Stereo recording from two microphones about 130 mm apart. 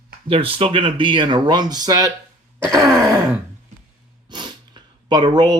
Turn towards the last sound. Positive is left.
turn(degrees=-35)  # may be behind; listen again after turning